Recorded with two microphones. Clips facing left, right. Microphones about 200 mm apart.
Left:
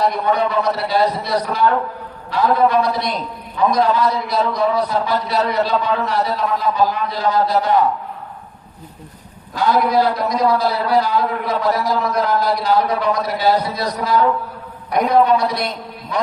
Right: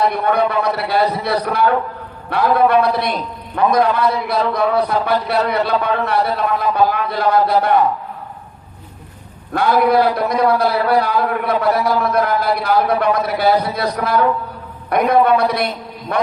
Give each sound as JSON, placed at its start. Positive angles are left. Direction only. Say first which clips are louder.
{"t": 0.0, "sound": "a man's voice", "louder": "right 1 dB", "side_deg": -60}
{"t": 9.5, "sound": "a man's voice", "louder": "right 2 dB", "side_deg": -60}